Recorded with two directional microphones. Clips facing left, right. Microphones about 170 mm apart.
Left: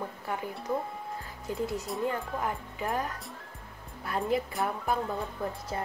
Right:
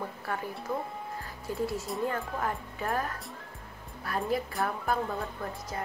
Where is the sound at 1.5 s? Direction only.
20° left (ahead or behind).